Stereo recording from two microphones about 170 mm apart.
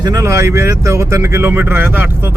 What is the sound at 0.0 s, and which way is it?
Speech, 20° right (ahead or behind).